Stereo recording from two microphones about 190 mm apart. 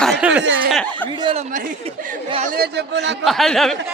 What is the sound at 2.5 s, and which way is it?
Speech, 60° right (ahead or behind).